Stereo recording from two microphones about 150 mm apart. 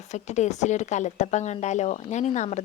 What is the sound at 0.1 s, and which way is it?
A woman's voice, 50° left (ahead or behind).